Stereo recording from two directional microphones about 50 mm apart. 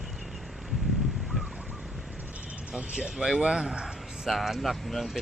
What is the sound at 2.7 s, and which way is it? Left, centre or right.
Speech, centre.